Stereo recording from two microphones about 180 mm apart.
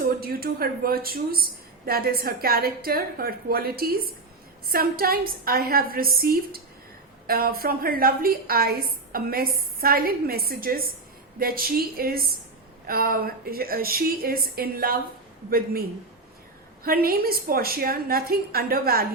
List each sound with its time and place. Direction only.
0.2 s a woman's voice: 55° right (ahead or behind)
16.8 s a woman's voice: 55° right (ahead or behind)